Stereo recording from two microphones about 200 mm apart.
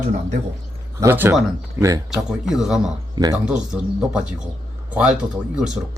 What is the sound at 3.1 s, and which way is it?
Speech, 20° right (ahead or behind).